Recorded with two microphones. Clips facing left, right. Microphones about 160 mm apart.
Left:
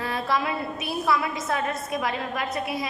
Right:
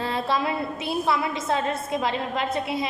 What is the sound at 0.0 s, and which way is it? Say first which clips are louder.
A woman's voice: right 1 dB; 25° right (ahead or behind).